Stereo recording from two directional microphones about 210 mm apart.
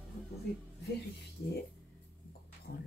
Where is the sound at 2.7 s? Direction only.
45° left (ahead or behind).